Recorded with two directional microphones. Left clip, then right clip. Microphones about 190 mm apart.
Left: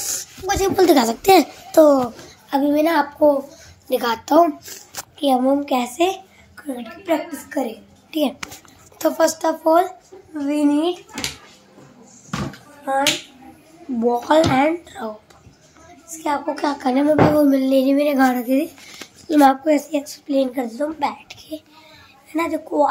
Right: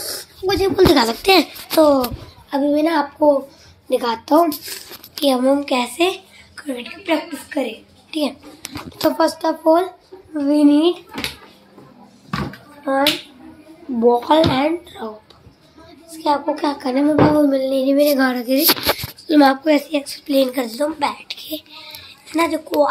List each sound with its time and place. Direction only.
0.1 s a child's voice: 25° left (ahead or behind)
2.5 s child singing: 15° left (ahead or behind)
3.9 s a woman's voice: centre (ahead or behind)
6.7 s a woman's voice: centre (ahead or behind)
8.1 s a child's voice: 20° left (ahead or behind)
9.0 s child singing: centre (ahead or behind)
10.3 s a woman's voice: centre (ahead or behind)
13.9 s a woman's voice: 5° right (ahead or behind)
14.5 s child singing: 10° left (ahead or behind)
16.3 s child singing: 5° left (ahead or behind)
19.2 s a woman's voice: centre (ahead or behind)